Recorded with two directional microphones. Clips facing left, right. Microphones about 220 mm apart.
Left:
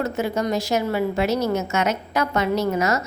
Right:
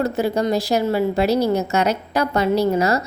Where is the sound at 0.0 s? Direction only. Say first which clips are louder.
Right 4 dB; 35° right (ahead or behind).